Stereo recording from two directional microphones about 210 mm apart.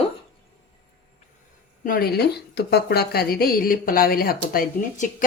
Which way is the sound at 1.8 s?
45° left (ahead or behind).